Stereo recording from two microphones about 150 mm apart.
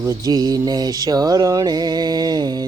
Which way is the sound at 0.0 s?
25° right (ahead or behind).